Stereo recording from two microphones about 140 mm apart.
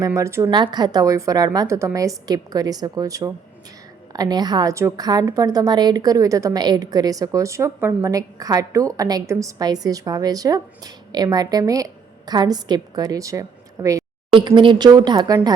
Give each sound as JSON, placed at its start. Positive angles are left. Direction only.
{"t": 0.0, "sound": "a woman's voice", "side_deg": -20}
{"t": 0.5, "sound": "a woman's voice", "side_deg": -30}
{"t": 14.3, "sound": "speech", "side_deg": -35}